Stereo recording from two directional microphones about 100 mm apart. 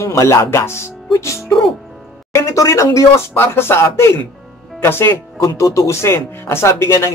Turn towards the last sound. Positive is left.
turn(degrees=25)  # may be behind; listen again after turning